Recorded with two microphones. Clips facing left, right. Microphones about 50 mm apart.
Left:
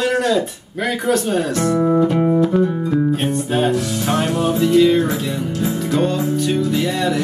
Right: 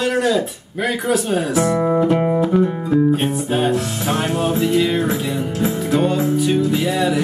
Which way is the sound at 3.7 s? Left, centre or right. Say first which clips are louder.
Left 1 dB; right.